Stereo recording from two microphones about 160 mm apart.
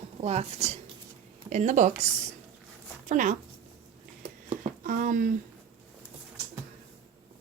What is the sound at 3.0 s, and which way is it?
Speech, 55° right (ahead or behind).